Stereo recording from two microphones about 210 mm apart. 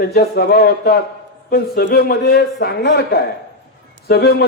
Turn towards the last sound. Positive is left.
turn(degrees=50)  # may be behind; listen again after turning